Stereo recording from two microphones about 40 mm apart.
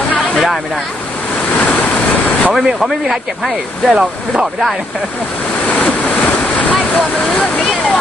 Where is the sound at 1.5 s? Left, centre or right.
Left.